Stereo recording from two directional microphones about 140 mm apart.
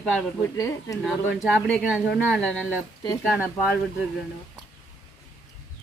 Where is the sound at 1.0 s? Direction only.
Centre (ahead or behind).